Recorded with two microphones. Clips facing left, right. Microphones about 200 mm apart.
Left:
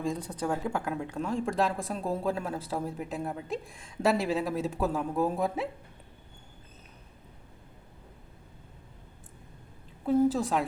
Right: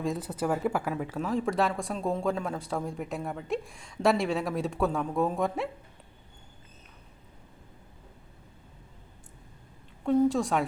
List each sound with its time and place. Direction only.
0.0 s speech: 5° right (ahead or behind)
10.1 s speech: 5° left (ahead or behind)